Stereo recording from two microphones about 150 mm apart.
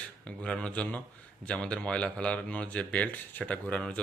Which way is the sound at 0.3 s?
5° left (ahead or behind).